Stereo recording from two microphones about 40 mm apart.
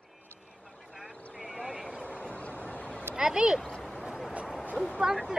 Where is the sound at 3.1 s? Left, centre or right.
Centre.